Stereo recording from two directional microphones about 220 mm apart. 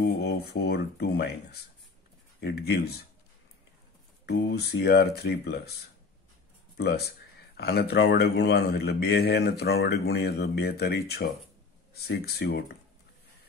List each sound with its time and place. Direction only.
0.0 s speech: 50° left (ahead or behind)
4.3 s speech: 50° left (ahead or behind)
7.5 s speech: 50° left (ahead or behind)